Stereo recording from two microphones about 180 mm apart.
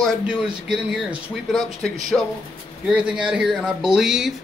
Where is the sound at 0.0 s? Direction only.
5° right (ahead or behind).